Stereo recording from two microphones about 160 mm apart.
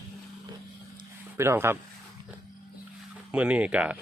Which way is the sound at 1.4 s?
15° right (ahead or behind).